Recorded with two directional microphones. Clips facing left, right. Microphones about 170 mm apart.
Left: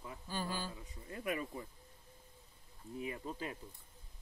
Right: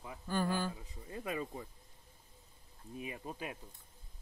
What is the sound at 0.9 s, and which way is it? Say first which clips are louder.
Speech: even; 25° right (ahead or behind).